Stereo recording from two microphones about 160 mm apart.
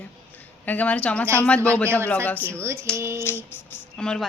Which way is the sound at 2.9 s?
15° right (ahead or behind).